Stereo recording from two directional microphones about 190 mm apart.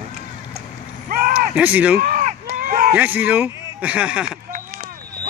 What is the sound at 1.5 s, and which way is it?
Speech, 5° right (ahead or behind).